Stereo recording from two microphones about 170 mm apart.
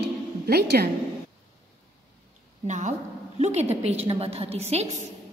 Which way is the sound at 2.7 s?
45° right (ahead or behind).